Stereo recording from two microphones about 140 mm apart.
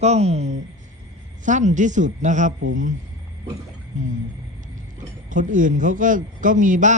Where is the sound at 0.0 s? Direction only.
50° right (ahead or behind).